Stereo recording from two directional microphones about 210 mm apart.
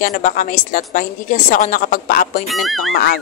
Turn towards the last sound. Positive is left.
turn(degrees=45)  # may be behind; listen again after turning